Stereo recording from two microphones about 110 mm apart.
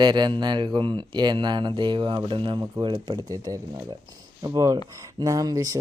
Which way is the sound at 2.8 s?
40° right (ahead or behind).